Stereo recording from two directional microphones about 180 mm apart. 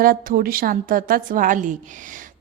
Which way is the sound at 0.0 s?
50° right (ahead or behind).